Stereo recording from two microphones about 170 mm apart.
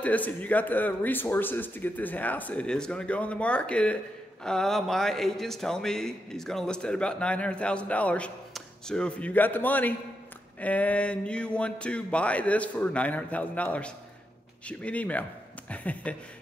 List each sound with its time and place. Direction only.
0.0 s speech: 10° left (ahead or behind)